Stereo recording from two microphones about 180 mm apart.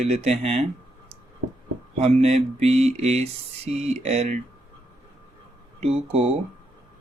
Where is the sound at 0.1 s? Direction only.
35° right (ahead or behind).